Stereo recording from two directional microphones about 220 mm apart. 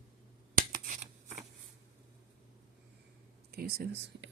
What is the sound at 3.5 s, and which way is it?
Speech, 45° right (ahead or behind).